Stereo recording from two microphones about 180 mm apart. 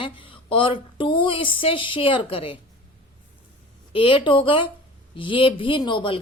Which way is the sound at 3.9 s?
30° left (ahead or behind).